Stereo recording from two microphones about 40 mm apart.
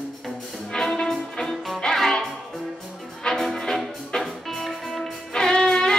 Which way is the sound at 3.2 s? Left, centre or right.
Centre.